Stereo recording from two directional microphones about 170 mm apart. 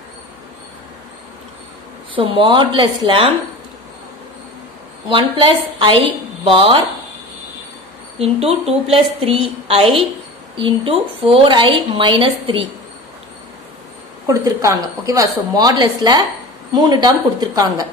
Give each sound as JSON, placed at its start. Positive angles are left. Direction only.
{"t": 2.1, "sound": "a woman's voice", "side_deg": -30}
{"t": 5.1, "sound": "a woman's voice", "side_deg": -30}
{"t": 8.2, "sound": "a woman's voice", "side_deg": -35}
{"t": 14.2, "sound": "a woman's voice", "side_deg": -20}